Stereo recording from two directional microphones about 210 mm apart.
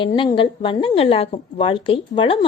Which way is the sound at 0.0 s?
25° left (ahead or behind).